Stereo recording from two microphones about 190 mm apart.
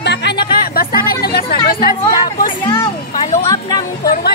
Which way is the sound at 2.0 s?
50° left (ahead or behind).